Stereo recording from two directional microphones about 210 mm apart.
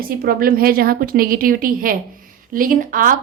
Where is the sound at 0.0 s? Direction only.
45° right (ahead or behind).